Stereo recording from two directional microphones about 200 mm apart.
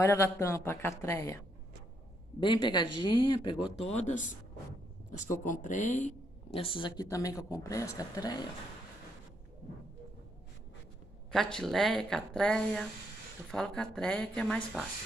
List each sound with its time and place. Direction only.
0.0 s speech: 15° left (ahead or behind)
2.4 s speech: 25° left (ahead or behind)
11.3 s speech: centre (ahead or behind)